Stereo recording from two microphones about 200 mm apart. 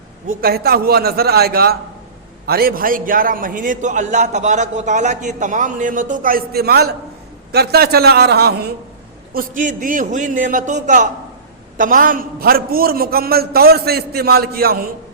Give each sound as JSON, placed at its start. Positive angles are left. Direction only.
{"t": 0.3, "sound": "a man's voice", "side_deg": -50}